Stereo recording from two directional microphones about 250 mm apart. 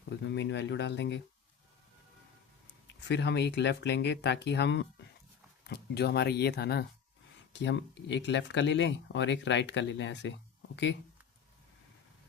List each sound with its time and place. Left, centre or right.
0.1 s speech: left
3.1 s speech: left